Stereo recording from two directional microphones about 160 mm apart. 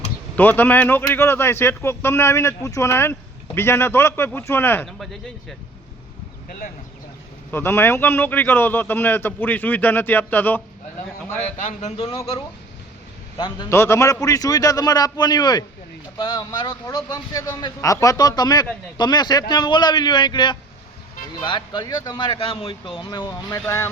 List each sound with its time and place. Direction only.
0.3 s a man's voice: 10° left (ahead or behind)
4.9 s speech: centre (ahead or behind)
7.5 s a man's voice: 15° left (ahead or behind)
11.5 s speech: 45° left (ahead or behind)
13.7 s a man's voice: 15° left (ahead or behind)